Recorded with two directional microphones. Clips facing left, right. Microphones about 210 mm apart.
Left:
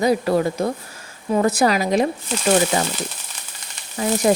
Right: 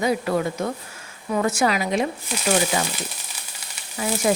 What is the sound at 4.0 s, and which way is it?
Speech, 40° left (ahead or behind).